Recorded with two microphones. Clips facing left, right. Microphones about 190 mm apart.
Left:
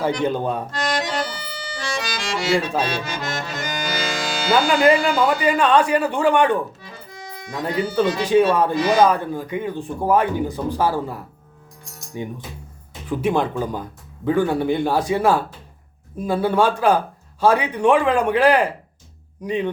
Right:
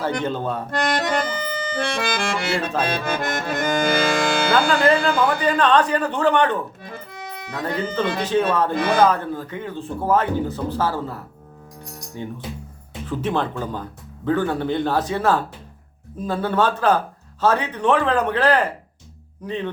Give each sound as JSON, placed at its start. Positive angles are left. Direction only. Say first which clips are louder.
{"t": 0.2, "sound": "speech", "louder": "left 3 dB", "side_deg": 15}
{"t": 0.7, "sound": "accordion", "louder": "right 2 dB", "side_deg": -55}
{"t": 5.4, "sound": "speech", "louder": "left 1 dB", "side_deg": 10}
{"t": 6.8, "sound": "music", "louder": "right 3 dB", "side_deg": -55}
{"t": 7.6, "sound": "speech", "louder": "left 3 dB", "side_deg": 10}
{"t": 8.7, "sound": "speech", "louder": "left 1 dB", "side_deg": -55}
{"t": 9.0, "sound": "speech", "louder": "left 1 dB", "side_deg": 10}